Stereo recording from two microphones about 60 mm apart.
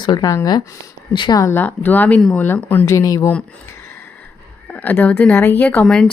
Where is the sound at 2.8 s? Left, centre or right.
Left.